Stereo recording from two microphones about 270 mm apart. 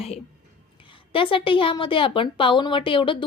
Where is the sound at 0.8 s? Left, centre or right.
Centre.